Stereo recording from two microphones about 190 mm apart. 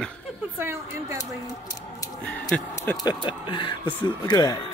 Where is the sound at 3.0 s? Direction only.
25° left (ahead or behind).